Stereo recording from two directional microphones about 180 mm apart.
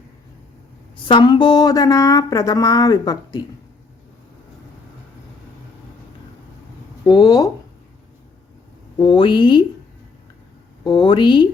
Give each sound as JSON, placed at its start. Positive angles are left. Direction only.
{"t": 1.0, "sound": "speech", "side_deg": 25}
{"t": 7.0, "sound": "speech", "side_deg": 25}
{"t": 9.0, "sound": "speech", "side_deg": 30}
{"t": 10.8, "sound": "speech", "side_deg": 25}